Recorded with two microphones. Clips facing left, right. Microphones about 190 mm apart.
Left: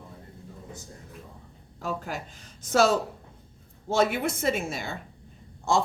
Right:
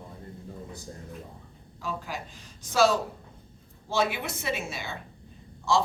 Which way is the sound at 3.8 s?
50° left (ahead or behind).